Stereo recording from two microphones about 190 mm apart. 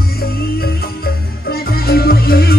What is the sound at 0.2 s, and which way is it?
Music, 55° left (ahead or behind).